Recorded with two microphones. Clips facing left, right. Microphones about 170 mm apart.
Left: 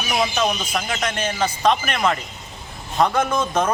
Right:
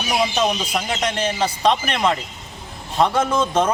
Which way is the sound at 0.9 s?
30° right (ahead or behind).